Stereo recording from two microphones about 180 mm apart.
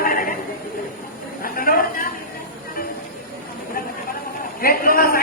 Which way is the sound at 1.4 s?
55° left (ahead or behind).